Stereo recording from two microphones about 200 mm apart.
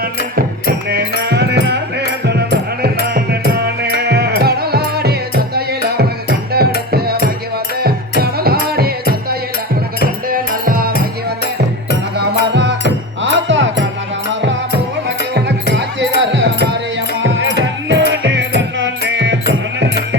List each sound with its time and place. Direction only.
0.9 s music: 55° right (ahead or behind)
10.2 s music: 45° right (ahead or behind)
13.2 s music: 70° right (ahead or behind)
16.2 s music: 60° right (ahead or behind)
17.2 s music: 75° right (ahead or behind)